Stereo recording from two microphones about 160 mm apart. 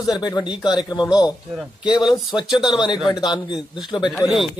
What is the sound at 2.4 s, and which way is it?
Speech, centre (ahead or behind).